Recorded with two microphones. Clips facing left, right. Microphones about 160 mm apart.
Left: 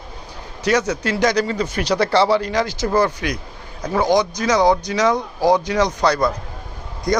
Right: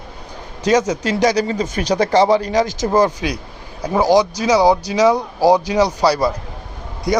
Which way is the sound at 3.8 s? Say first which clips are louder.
Right 3 dB; 10° right (ahead or behind).